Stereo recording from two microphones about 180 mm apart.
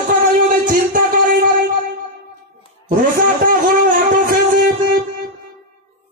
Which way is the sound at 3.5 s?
50° right (ahead or behind).